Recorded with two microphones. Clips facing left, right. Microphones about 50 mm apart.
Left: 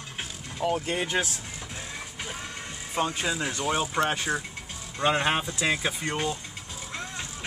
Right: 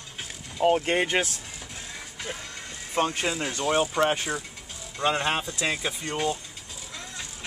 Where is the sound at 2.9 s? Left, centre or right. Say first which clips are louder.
Right 2 dB; right.